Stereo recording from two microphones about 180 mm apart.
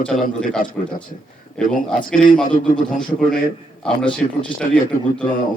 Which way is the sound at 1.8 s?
5° left (ahead or behind).